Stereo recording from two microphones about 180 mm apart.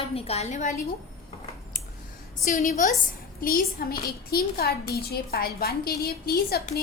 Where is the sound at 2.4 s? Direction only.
45° left (ahead or behind).